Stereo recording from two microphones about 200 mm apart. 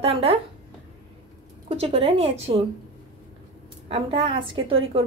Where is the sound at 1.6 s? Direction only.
30° right (ahead or behind).